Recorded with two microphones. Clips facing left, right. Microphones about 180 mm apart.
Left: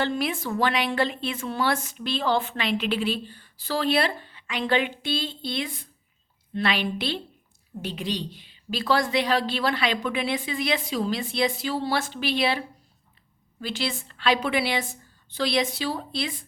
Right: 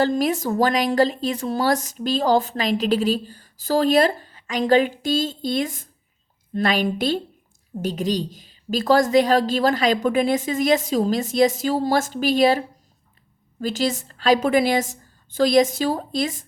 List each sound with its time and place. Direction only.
0.0 s a woman's voice: 40° right (ahead or behind)